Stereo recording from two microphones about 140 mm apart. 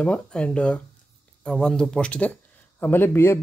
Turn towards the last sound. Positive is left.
turn(degrees=15)  # may be behind; listen again after turning